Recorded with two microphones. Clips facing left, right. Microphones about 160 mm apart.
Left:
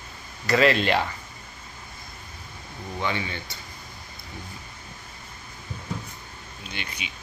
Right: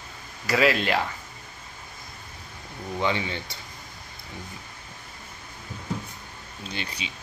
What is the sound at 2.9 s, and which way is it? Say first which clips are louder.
Speech: right 2 dB; 20° right (ahead or behind).